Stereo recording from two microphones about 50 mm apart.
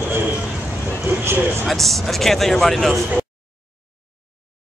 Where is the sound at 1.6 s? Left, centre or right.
Centre.